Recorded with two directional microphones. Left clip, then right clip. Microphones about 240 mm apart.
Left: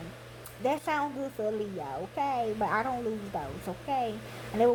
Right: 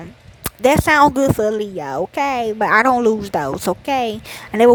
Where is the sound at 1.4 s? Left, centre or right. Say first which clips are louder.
Right 13 dB; right.